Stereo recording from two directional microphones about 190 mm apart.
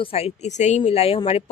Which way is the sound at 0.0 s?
30° left (ahead or behind).